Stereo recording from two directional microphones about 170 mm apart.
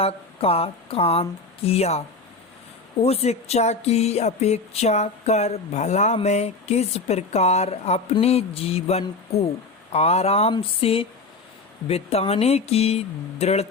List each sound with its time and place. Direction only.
0.0 s speech: 35° left (ahead or behind)